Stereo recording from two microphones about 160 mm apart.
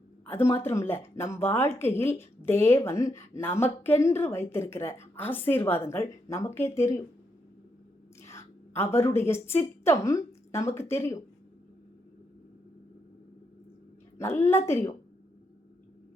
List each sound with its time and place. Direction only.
0.3 s speech: 15° left (ahead or behind)
8.2 s a woman's voice: 20° left (ahead or behind)
14.2 s speech: 15° left (ahead or behind)